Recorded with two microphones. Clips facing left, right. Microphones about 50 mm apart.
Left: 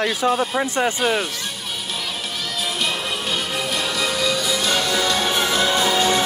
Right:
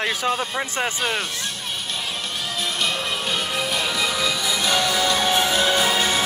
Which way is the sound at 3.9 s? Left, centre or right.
Centre.